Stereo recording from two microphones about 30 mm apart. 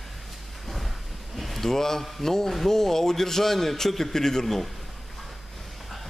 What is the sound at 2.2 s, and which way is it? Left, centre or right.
A man's voice, centre.